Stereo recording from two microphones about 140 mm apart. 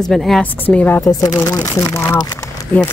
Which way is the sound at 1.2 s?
25° left (ahead or behind).